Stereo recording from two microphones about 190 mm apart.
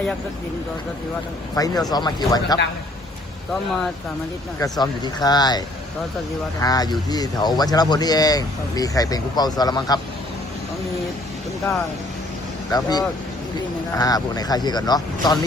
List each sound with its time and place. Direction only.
1.5 s speech: 20° left (ahead or behind)
4.6 s speech: 20° left (ahead or behind)
12.7 s speech: 20° left (ahead or behind)